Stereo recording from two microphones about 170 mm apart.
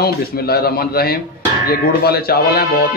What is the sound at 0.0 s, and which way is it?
Speech, 65° left (ahead or behind).